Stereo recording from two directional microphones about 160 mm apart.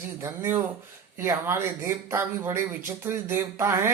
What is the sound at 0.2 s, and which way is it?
Speech, 15° right (ahead or behind).